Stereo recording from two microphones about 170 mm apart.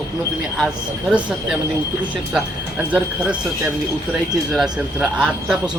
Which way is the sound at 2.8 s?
5° right (ahead or behind).